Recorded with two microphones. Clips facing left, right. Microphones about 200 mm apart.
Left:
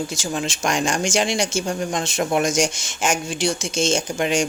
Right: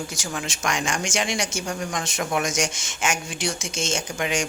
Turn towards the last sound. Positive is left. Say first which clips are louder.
# left 5 dB
turn(degrees=30)  # may be behind; listen again after turning